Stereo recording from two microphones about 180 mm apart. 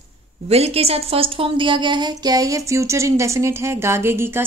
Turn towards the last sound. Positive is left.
turn(degrees=-15)  # may be behind; listen again after turning